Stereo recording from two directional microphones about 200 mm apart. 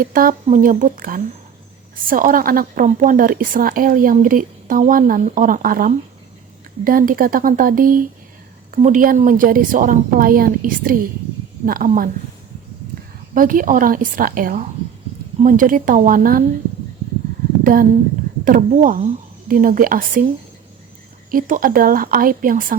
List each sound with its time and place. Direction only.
0.0 s a woman's voice: 45° right (ahead or behind)
13.3 s a woman's voice: 45° right (ahead or behind)
17.6 s a woman's voice: 45° right (ahead or behind)
21.2 s a woman's voice: 40° right (ahead or behind)